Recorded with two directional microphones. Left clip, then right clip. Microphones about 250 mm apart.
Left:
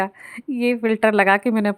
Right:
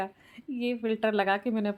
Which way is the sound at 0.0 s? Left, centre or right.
Left.